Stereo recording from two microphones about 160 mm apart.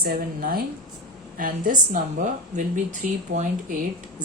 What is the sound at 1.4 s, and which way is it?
A woman's voice, 55° right (ahead or behind).